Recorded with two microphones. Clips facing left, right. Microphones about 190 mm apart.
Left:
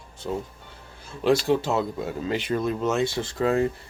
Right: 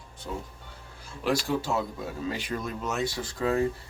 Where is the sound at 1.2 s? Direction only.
25° left (ahead or behind).